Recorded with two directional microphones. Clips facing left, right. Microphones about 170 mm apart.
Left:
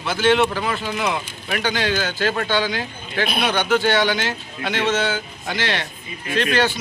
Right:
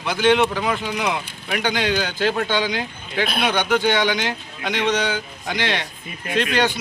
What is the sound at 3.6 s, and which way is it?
A man's voice, 15° right (ahead or behind).